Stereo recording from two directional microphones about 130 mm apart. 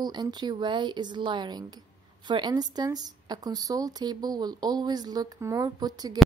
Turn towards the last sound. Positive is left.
turn(degrees=-30)  # may be behind; listen again after turning